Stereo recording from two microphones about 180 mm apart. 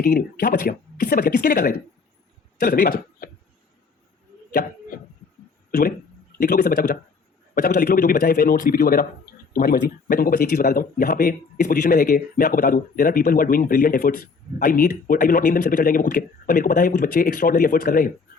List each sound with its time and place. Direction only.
0.0 s a man's voice: 50° left (ahead or behind)
6.4 s speech: 50° left (ahead or behind)